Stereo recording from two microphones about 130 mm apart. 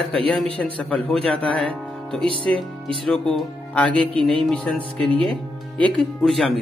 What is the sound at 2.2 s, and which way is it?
Speech, 40° right (ahead or behind).